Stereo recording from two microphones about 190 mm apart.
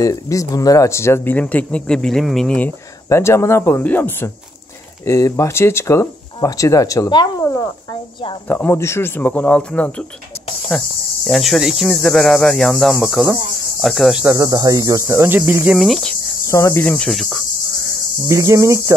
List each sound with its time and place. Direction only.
0.0 s speech: 15° left (ahead or behind); by 14.3 s centre (ahead or behind)
14.3 s speech: 15° right (ahead or behind); by 16.2 s centre (ahead or behind)
16.4 s speech: 15° left (ahead or behind); by 17.5 s centre (ahead or behind)
18.3 s speech: 15° right (ahead or behind)